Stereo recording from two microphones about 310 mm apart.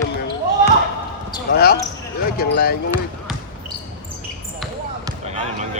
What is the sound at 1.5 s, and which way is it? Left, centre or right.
Speech, left.